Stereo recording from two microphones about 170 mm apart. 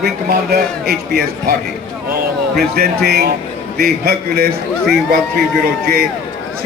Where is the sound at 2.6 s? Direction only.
65° right (ahead or behind).